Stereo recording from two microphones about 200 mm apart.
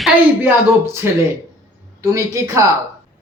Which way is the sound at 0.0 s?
10° right (ahead or behind).